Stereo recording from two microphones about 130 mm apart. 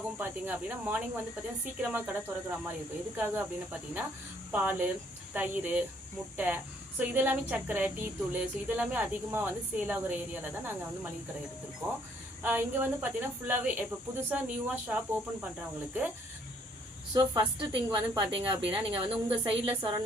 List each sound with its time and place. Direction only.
0.2 s speech: 15° right (ahead or behind)
12.4 s speech: 15° right (ahead or behind)
17.2 s a woman's voice: 35° right (ahead or behind)